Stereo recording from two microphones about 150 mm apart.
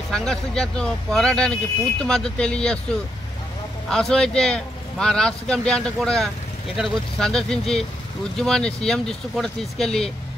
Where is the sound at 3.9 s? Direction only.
5° left (ahead or behind).